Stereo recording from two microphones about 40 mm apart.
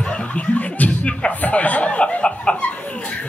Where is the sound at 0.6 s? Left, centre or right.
Left.